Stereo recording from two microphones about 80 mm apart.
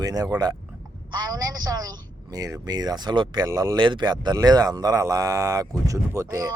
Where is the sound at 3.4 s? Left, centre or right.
Right.